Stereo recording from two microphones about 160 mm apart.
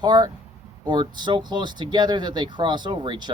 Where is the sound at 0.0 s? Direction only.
25° right (ahead or behind).